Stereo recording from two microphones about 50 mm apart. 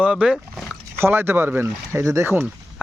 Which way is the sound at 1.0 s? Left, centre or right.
Right.